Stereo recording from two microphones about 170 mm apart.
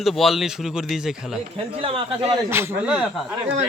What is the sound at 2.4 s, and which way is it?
Speech, 15° right (ahead or behind).